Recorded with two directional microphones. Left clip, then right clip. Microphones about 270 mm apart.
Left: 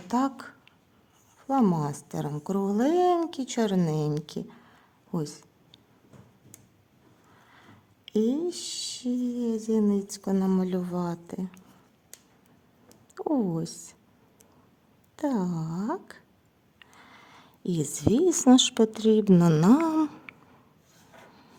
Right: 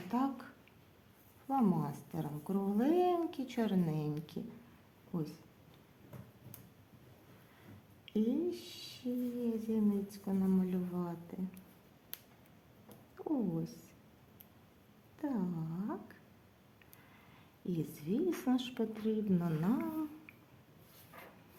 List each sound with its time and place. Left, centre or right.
0.1 s speech: left
8.0 s speech: left
13.1 s speech: left
15.1 s a woman's voice: left